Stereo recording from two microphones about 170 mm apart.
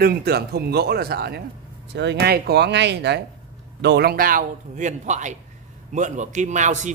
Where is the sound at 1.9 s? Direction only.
80° right.